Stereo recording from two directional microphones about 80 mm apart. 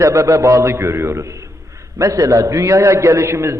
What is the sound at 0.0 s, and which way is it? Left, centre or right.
A man's voice, right.